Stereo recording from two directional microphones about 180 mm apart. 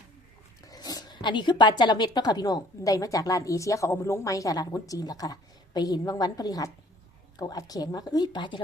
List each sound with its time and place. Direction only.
0.6 s speech: 20° left (ahead or behind)